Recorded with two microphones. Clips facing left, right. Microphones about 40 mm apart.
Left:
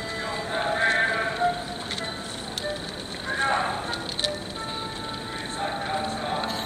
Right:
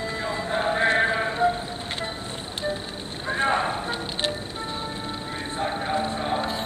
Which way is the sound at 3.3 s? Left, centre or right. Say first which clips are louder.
Right 1 dB; right.